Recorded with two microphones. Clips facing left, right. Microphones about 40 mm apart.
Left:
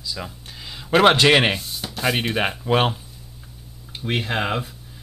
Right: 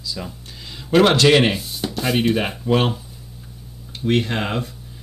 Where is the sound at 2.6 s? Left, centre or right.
Centre.